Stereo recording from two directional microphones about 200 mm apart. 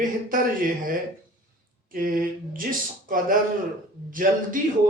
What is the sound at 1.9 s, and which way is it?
A man's voice, 45° right (ahead or behind).